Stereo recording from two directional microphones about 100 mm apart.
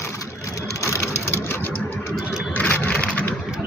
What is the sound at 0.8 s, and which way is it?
Sewing machine, 30° left (ahead or behind).